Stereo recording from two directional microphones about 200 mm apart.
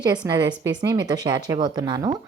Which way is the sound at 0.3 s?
20° right (ahead or behind).